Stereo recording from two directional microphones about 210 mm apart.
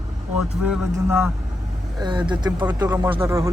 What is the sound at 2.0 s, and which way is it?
A man's voice, 20° right (ahead or behind).